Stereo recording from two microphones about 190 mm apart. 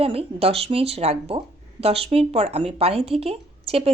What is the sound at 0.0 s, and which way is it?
Speech, 30° right (ahead or behind).